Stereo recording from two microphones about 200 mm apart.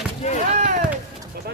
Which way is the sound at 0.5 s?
40° right (ahead or behind).